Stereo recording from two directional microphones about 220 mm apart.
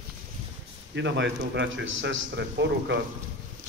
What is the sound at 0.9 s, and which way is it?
A man's voice, 55° right (ahead or behind).